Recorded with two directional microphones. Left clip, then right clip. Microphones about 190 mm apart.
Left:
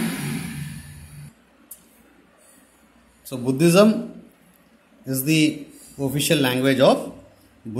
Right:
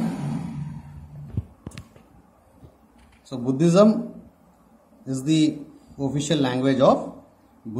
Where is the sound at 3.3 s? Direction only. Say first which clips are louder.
Left 3 dB; 10° left (ahead or behind).